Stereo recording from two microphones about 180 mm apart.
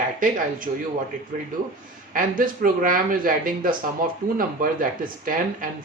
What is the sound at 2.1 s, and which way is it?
Speech, 50° right (ahead or behind).